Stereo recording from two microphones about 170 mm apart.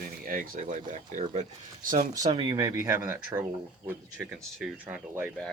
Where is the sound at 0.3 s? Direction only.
50° right (ahead or behind).